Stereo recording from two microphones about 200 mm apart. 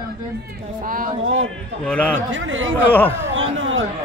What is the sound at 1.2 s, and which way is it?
A man's voice, 80° right.